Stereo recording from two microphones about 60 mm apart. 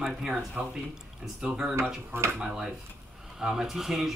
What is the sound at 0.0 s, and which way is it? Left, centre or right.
Speech, centre.